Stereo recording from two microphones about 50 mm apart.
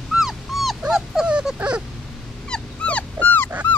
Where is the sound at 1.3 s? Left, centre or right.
Centre.